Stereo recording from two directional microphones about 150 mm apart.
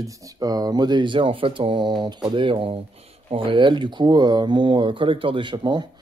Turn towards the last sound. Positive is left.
turn(degrees=-30)  # may be behind; listen again after turning